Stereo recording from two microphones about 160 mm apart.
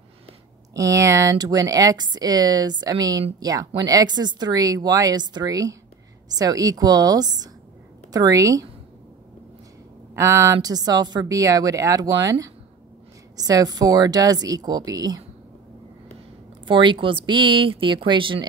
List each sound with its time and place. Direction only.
0.7 s speech: 20° right (ahead or behind)
10.1 s speech: 20° right (ahead or behind)
16.6 s speech: 30° right (ahead or behind)